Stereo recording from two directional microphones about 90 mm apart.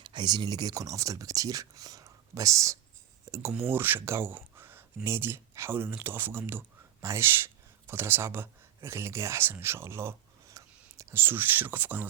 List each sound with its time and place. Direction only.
0.0 s speech: 55° right (ahead or behind); by 2.7 s 35° right (ahead or behind)
3.6 s speech: 25° right (ahead or behind)